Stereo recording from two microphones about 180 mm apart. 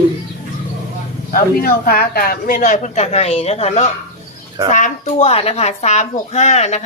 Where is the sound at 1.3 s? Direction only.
55° left (ahead or behind).